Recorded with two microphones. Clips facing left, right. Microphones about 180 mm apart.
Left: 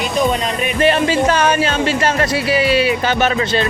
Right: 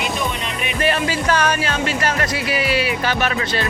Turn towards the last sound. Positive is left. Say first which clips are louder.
# left 5 dB
turn(degrees=25)  # may be behind; listen again after turning